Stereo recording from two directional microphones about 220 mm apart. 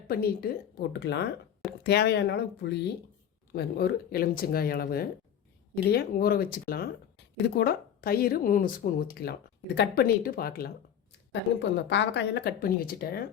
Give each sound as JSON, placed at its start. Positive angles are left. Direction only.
{"t": 0.1, "sound": "speech", "side_deg": 45}
{"t": 11.3, "sound": "speech", "side_deg": 55}